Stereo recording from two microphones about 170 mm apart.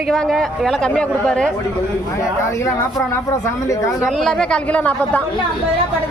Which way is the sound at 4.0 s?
Centre (ahead or behind).